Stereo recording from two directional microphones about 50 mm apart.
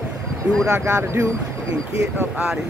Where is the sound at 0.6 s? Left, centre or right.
Right.